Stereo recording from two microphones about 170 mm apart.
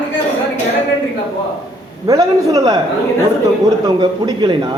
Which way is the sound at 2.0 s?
20° right (ahead or behind).